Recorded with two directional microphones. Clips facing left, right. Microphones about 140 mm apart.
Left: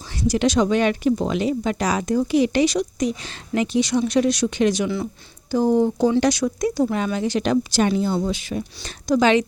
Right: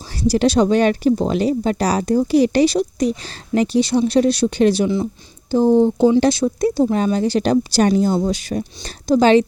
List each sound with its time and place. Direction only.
0.1 s speech: 35° right (ahead or behind)